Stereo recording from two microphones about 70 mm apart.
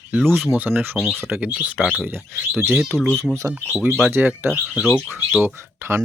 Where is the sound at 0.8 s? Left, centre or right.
Right.